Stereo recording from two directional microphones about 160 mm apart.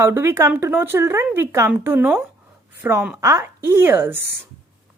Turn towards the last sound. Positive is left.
turn(degrees=-15)  # may be behind; listen again after turning